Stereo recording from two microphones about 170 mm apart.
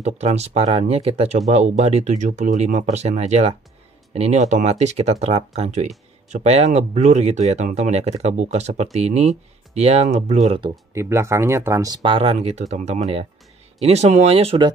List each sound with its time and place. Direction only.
0.0 s speech: 40° right (ahead or behind)
11.0 s speech: 15° right (ahead or behind); by 14.7 s 35° right (ahead or behind)